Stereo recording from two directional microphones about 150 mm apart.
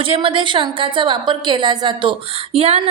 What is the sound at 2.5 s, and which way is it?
Speech, 40° right (ahead or behind).